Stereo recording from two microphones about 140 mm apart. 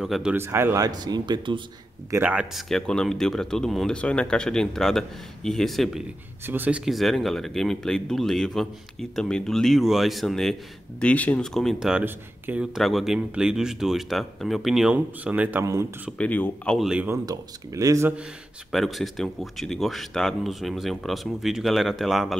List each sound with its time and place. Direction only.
0.0 s speech: 5° right (ahead or behind)
0.4 s speech: 20° right (ahead or behind); by 1.6 s 35° right (ahead or behind)
2.0 s speech: 20° right (ahead or behind)
2.3 s speech: centre (ahead or behind)
6.4 s speech: 15° right (ahead or behind)
16.2 s speech: 10° left (ahead or behind)
16.7 s speech: centre (ahead or behind)
17.3 s speech: 25° right (ahead or behind)
18.7 s speech: centre (ahead or behind)